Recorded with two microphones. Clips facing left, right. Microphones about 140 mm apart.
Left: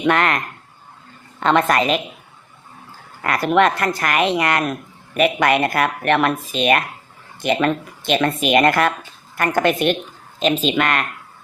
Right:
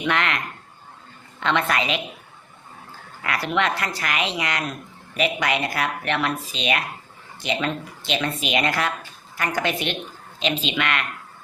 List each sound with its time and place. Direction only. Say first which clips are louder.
0.0 s speech: left 6 dB; 45° left (ahead or behind)
3.2 s speech: left 7 dB; 45° left (ahead or behind)